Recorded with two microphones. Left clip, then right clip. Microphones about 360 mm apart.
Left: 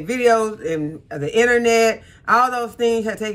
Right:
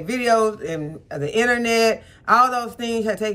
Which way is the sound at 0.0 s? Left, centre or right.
Centre.